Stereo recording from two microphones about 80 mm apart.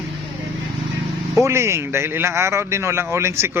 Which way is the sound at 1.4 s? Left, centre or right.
Right.